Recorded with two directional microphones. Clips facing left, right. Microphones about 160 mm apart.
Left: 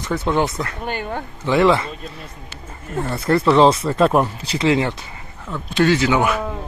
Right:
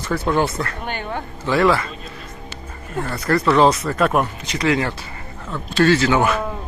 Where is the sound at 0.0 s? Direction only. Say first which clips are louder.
Even; 20° left (ahead or behind).